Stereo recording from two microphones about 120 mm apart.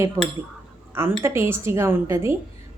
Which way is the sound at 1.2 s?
20° right (ahead or behind).